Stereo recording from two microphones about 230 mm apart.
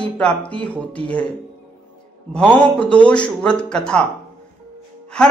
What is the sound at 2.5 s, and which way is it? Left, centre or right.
A man's voice, centre.